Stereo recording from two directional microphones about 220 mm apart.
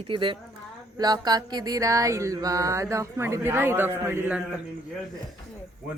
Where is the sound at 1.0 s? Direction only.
20° right (ahead or behind).